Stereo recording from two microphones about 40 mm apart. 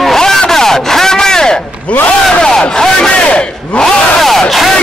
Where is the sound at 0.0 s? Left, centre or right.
Centre.